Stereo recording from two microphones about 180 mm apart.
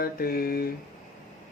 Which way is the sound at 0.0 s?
55° left (ahead or behind).